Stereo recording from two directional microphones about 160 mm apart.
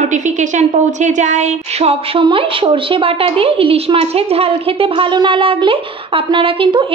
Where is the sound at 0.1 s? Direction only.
50° right (ahead or behind).